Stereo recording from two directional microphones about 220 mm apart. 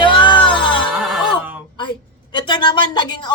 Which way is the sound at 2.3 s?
20° left (ahead or behind).